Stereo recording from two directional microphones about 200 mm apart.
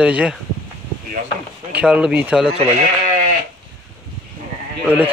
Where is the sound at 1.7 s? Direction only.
5° right (ahead or behind).